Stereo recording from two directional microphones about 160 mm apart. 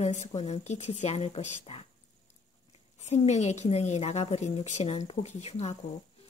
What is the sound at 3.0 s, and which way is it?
Speech, 45° left (ahead or behind).